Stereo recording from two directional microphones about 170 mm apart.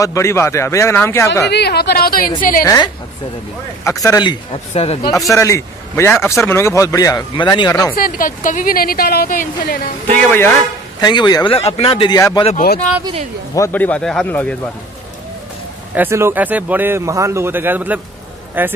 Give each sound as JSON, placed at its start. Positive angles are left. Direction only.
{"t": 0.0, "sound": "a man's voice", "side_deg": 15}
{"t": 1.5, "sound": "a woman's voice", "side_deg": 75}
{"t": 2.6, "sound": "a man's voice", "side_deg": 20}
{"t": 5.3, "sound": "a man's voice", "side_deg": 15}
{"t": 7.9, "sound": "a woman's voice", "side_deg": 55}
{"t": 10.1, "sound": "a man's voice", "side_deg": 10}
{"t": 11.0, "sound": "a man's voice", "side_deg": 25}
{"t": 12.2, "sound": "a man's voice", "side_deg": 20}
{"t": 12.5, "sound": "a woman's voice", "side_deg": 65}
{"t": 13.6, "sound": "a man's voice", "side_deg": 10}
{"t": 15.9, "sound": "speech", "side_deg": -15}